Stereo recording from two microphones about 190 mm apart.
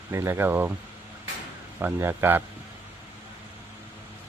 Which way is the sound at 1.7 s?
10° right (ahead or behind).